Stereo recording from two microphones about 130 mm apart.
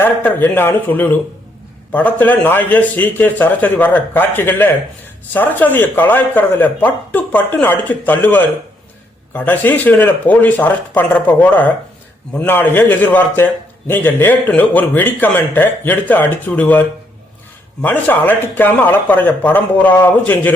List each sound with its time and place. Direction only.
0.0 s a man's voice: 15° left (ahead or behind)
17.8 s a man's voice: 15° left (ahead or behind)